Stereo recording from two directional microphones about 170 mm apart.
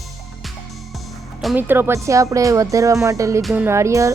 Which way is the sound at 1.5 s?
10° right (ahead or behind).